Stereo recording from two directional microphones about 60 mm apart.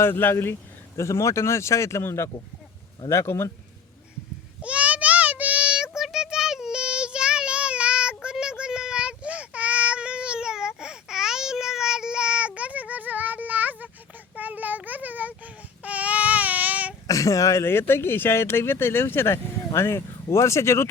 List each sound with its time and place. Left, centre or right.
0.0 s speech: left
0.9 s speech: left
4.6 s child singing: right
6.0 s child singing: centre; by 15.4 s right
15.8 s baby cry: right
17.1 s speech: left